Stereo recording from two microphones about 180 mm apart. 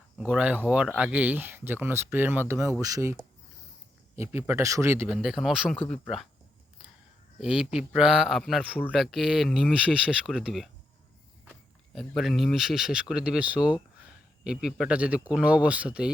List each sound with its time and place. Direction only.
0.2 s speech: 5° right (ahead or behind)
7.3 s speech: 5° right (ahead or behind)
11.9 s speech: centre (ahead or behind)